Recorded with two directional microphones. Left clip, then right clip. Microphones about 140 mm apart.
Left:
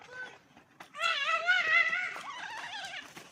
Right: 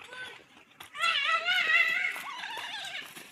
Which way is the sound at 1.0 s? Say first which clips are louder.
Right 3 dB; 35° left (ahead or behind).